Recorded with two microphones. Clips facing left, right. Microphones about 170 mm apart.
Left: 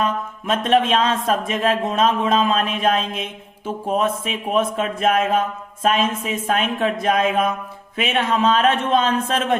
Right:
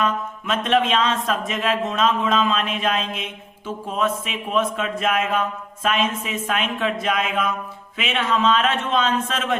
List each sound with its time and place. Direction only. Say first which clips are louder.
0.0 s speech: left 1 dB; 35° left (ahead or behind)